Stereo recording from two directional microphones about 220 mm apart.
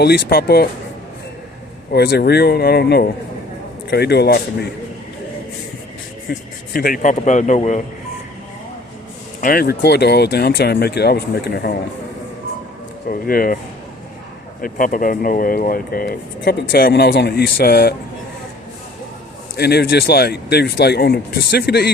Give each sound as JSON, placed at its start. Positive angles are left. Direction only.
{"t": 0.0, "sound": "speech", "side_deg": 45}
{"t": 1.9, "sound": "speech", "side_deg": 45}
{"t": 6.7, "sound": "speech", "side_deg": 40}
{"t": 9.4, "sound": "speech", "side_deg": 40}
{"t": 13.1, "sound": "speech", "side_deg": 40}
{"t": 14.6, "sound": "speech", "side_deg": 40}
{"t": 19.5, "sound": "speech", "side_deg": 45}